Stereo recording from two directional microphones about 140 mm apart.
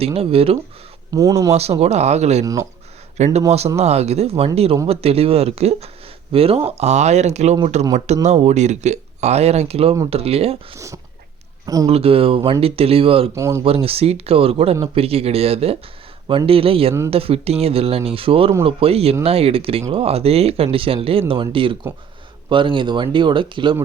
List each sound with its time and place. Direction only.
0.0 s speech: 45° right (ahead or behind)
1.1 s speech: 25° right (ahead or behind)
1.5 s speech: 50° right (ahead or behind)
2.4 s speech: 25° right (ahead or behind)
3.2 s speech: 50° right (ahead or behind)
10.8 s speech: 20° right (ahead or behind)
11.9 s speech: 45° right (ahead or behind)
13.3 s speech: 20° right (ahead or behind)
13.7 s speech: 45° right (ahead or behind)